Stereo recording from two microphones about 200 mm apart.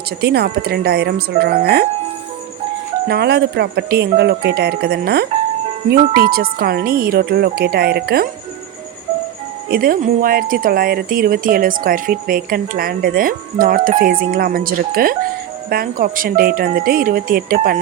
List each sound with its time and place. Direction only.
0.2 s speech: 50° right (ahead or behind)
3.1 s speech: 55° right (ahead or behind)
9.6 s speech: 45° right (ahead or behind)